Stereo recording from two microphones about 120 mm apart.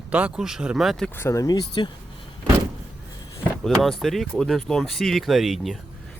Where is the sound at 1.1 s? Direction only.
20° left (ahead or behind).